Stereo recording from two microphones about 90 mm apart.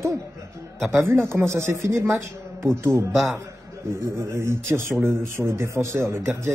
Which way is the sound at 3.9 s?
35° right (ahead or behind).